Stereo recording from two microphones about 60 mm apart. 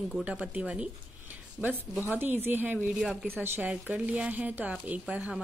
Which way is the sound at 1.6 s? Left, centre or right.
Right.